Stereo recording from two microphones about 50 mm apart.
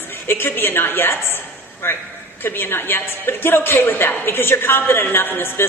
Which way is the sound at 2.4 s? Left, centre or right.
Left.